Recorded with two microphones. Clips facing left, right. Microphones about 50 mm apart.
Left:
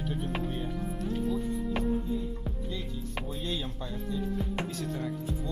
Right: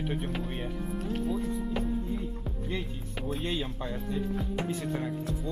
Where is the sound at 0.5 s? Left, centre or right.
Right.